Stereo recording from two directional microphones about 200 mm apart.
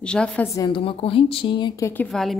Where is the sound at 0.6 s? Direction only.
25° left (ahead or behind); by 2.4 s centre (ahead or behind).